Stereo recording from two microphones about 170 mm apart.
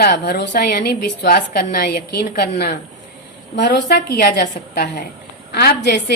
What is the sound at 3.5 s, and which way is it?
A woman's voice, 75° left (ahead or behind).